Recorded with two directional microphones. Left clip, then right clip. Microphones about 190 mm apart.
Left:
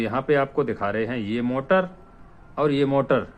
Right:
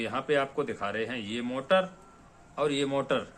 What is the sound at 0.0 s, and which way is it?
Speech, 50° left (ahead or behind).